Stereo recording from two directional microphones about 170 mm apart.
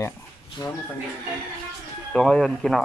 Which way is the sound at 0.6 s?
25° left (ahead or behind).